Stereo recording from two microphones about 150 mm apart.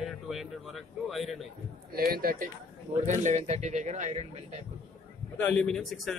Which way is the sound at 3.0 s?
55° right (ahead or behind).